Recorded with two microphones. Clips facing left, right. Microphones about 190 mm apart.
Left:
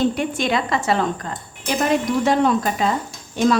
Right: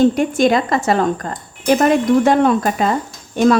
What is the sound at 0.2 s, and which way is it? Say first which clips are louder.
Speech: right 7 dB; 45° right (ahead or behind).